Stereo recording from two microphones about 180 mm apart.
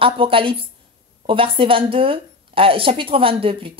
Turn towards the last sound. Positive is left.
turn(degrees=-30)  # may be behind; listen again after turning